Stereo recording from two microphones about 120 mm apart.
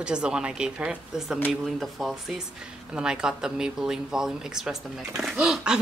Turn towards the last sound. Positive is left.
turn(degrees=-5)  # may be behind; listen again after turning